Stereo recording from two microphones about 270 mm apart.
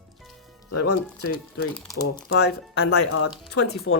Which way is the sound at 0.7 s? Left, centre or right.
Left.